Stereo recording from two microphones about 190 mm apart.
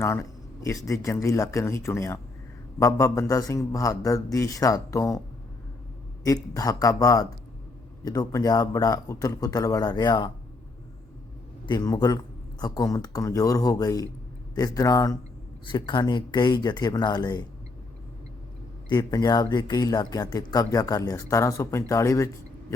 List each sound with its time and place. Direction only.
0.0 s a sound: 15° left (ahead or behind)
0.9 s speech: 15° left (ahead or behind)
6.2 s speech: 20° left (ahead or behind)
11.6 s speech: 20° left (ahead or behind)
18.9 s speech: 20° left (ahead or behind)